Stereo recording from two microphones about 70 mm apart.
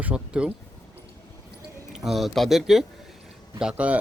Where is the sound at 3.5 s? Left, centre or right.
Centre.